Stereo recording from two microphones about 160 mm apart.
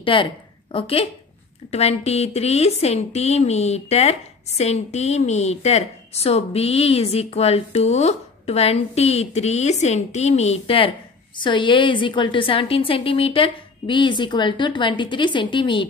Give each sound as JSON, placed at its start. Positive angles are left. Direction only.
{"t": 0.0, "sound": "a woman's voice", "side_deg": 35}